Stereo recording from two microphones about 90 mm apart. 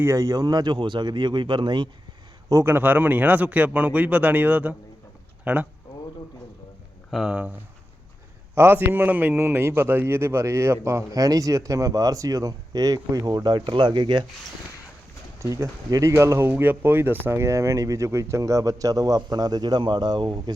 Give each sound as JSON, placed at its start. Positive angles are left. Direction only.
{"t": 0.0, "sound": "speech", "side_deg": -35}
{"t": 2.6, "sound": "speech", "side_deg": -20}
{"t": 7.1, "sound": "speech", "side_deg": -5}
{"t": 8.5, "sound": "a man's voice", "side_deg": -25}
{"t": 15.4, "sound": "a man's voice", "side_deg": -35}